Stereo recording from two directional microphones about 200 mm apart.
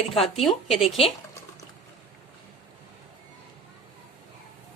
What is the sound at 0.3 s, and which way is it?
Speech, centre (ahead or behind).